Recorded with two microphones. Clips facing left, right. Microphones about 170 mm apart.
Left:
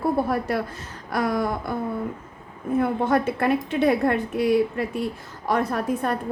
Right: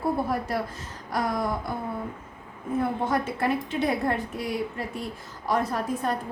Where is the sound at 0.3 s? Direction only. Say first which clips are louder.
Left 3 dB; 65° left (ahead or behind).